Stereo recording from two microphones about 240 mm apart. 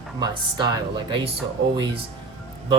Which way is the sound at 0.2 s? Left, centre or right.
Centre.